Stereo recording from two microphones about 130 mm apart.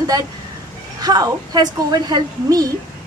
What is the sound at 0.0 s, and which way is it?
A woman's voice, 30° right (ahead or behind).